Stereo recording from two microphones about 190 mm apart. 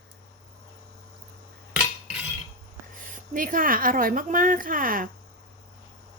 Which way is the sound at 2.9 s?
45° right (ahead or behind).